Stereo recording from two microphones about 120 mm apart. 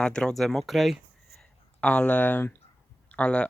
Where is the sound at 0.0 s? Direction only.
5° left (ahead or behind).